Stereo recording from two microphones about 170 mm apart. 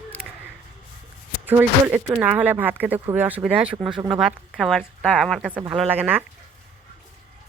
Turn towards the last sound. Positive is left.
turn(degrees=-10)  # may be behind; listen again after turning